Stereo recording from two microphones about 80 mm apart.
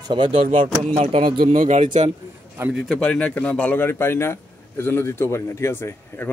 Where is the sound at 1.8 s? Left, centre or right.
Right.